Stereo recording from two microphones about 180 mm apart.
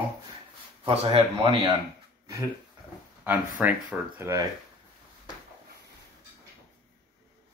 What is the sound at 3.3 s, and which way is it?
Speech, 10° right (ahead or behind).